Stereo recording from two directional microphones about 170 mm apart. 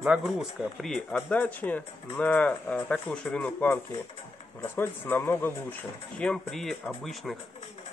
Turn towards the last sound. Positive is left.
turn(degrees=0)  # may be behind; listen again after turning